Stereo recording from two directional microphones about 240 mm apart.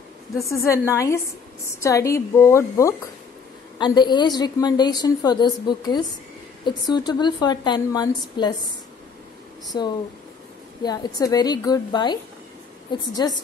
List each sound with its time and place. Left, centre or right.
0.4 s a woman's voice: centre
9.7 s a woman's voice: centre
13.2 s a woman's voice: centre